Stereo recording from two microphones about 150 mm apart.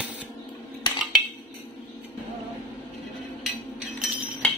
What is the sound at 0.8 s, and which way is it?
Cutlery, 30° left (ahead or behind).